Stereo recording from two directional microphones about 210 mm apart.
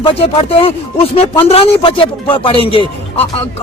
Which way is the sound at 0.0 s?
25° left (ahead or behind).